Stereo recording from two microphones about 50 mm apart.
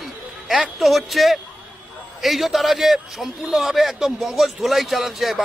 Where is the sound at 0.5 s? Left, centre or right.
Centre.